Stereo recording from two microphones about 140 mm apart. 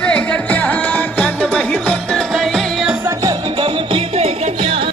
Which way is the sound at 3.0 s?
25° right (ahead or behind).